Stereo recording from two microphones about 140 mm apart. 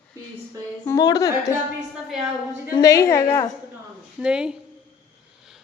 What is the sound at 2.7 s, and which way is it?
Speech, 25° left (ahead or behind).